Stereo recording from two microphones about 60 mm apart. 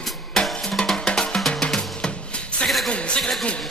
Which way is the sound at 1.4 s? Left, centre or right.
Centre.